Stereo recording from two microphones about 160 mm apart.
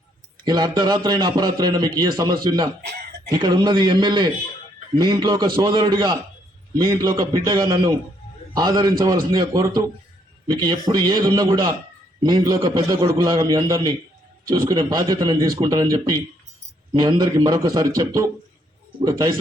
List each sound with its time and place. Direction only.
0.4 s a man's voice: 25° right (ahead or behind)
2.8 s a sound: 75° right (ahead or behind)
3.2 s a man's voice: 25° right (ahead or behind)